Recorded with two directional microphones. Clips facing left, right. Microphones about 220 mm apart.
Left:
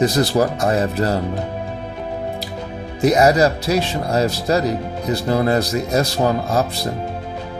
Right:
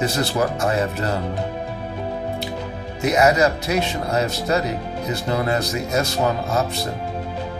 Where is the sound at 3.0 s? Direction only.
35° left (ahead or behind).